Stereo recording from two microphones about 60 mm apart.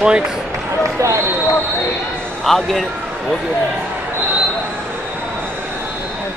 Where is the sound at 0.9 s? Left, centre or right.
Right.